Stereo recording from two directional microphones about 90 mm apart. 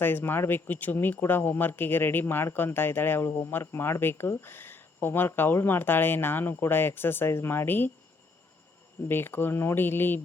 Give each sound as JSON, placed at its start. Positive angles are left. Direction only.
{"t": 0.0, "sound": "speech", "side_deg": 25}
{"t": 9.0, "sound": "speech", "side_deg": 25}